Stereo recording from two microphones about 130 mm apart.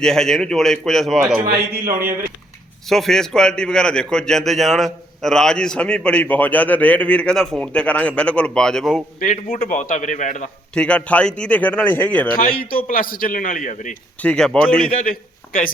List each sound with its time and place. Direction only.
0.0 s a man's voice: 5° left (ahead or behind)
2.9 s a man's voice: 5° left (ahead or behind)
9.2 s a man's voice: 90° left; by 10.5 s 70° left (ahead or behind)
10.8 s speech: 10° left (ahead or behind)
12.3 s a man's voice: 90° left
14.2 s a man's voice: 5° left (ahead or behind)
14.8 s a man's voice: 90° left